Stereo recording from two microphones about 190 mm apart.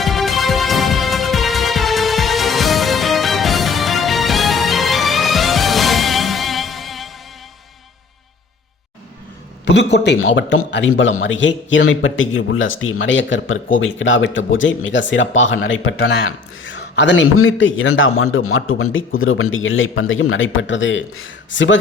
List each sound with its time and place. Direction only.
0.0 s music: centre (ahead or behind)
9.6 s a man's voice: 65° left (ahead or behind)